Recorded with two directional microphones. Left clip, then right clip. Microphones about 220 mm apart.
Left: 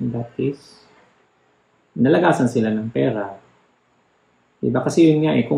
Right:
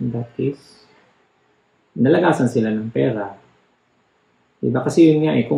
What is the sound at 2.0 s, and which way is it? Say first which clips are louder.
Speech: even; centre (ahead or behind).